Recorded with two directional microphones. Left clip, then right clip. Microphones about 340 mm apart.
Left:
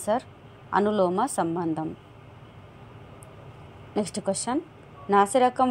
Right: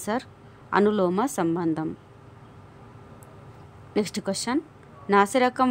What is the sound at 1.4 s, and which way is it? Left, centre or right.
Speech, right.